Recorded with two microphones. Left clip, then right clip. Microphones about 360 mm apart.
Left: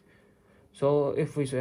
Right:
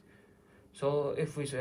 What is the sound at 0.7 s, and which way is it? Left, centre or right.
Speech, left.